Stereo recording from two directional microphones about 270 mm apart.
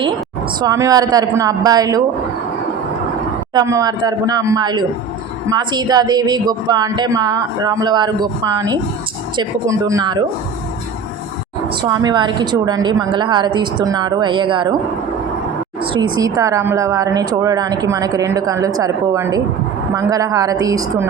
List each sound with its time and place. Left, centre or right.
0.7 s a woman's voice: centre
3.5 s a woman's voice: centre
11.7 s a woman's voice: centre
15.9 s a woman's voice: centre